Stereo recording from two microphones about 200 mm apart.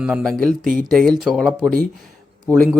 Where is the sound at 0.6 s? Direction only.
45° right (ahead or behind).